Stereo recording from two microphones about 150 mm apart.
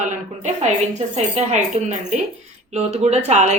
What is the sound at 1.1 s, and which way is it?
Speech, 45° right (ahead or behind).